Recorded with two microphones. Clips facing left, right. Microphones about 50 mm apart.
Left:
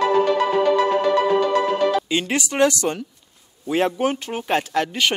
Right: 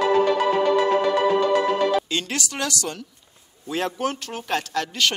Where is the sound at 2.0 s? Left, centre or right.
Centre.